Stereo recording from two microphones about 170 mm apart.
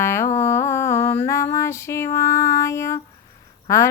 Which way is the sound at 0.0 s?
15° left (ahead or behind).